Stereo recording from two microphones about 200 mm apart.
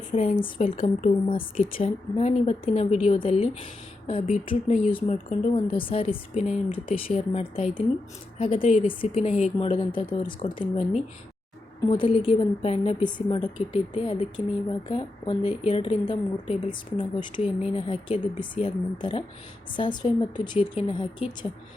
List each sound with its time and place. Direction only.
0.1 s speech: 30° left (ahead or behind)
11.9 s speech: 25° left (ahead or behind)